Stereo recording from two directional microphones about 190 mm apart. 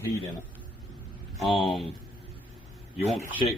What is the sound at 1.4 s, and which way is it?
Speech, centre (ahead or behind).